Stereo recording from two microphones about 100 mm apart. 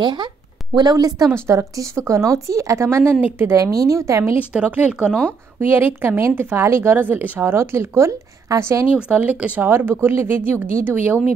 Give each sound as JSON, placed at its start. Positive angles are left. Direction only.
{"t": 0.0, "sound": "speech", "side_deg": -50}
{"t": 1.5, "sound": "speech", "side_deg": -30}
{"t": 4.4, "sound": "speech", "side_deg": -15}
{"t": 5.6, "sound": "speech", "side_deg": -20}
{"t": 8.9, "sound": "speech", "side_deg": -15}